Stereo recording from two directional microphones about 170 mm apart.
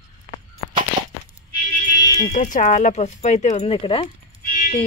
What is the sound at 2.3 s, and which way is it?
Speech, 50° left (ahead or behind).